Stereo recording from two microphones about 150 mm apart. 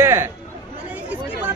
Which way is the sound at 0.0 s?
15° right (ahead or behind).